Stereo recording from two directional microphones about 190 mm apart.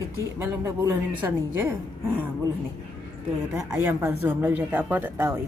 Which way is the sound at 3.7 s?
10° right (ahead or behind).